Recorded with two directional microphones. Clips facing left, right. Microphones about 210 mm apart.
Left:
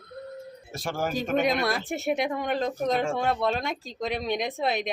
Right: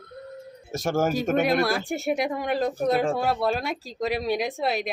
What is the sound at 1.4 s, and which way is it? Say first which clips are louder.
Speech: right 1 dB; 5° right (ahead or behind).